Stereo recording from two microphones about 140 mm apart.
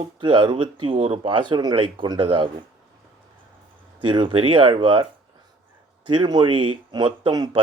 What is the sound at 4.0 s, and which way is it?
Speech, 35° right (ahead or behind).